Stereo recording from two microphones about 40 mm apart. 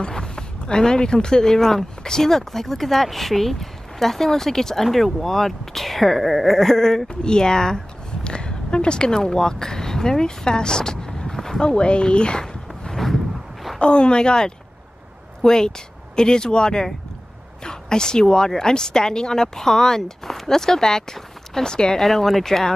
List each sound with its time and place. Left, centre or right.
0.0 s speech: centre
11.6 s a woman's voice: left
22.0 s speech: centre